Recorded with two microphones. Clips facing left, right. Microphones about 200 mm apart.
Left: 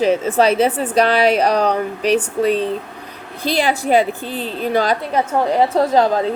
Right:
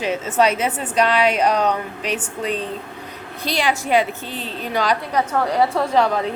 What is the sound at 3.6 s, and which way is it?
Speech, 35° left (ahead or behind).